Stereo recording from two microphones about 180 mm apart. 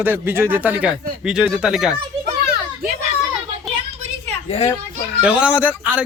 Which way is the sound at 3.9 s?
40° right (ahead or behind).